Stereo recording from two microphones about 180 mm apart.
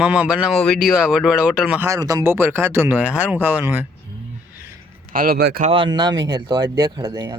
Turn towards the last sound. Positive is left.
turn(degrees=-20)  # may be behind; listen again after turning